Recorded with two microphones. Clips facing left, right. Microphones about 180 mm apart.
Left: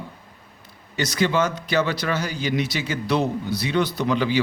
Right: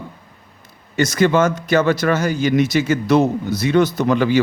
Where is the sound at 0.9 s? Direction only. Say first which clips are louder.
Right 6 dB; 50° right (ahead or behind).